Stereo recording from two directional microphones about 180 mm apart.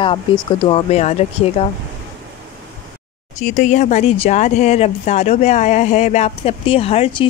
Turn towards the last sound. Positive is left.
turn(degrees=35)  # may be behind; listen again after turning